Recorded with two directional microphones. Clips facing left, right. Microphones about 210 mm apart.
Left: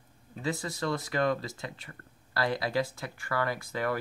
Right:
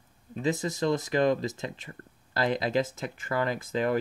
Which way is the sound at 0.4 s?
20° right (ahead or behind).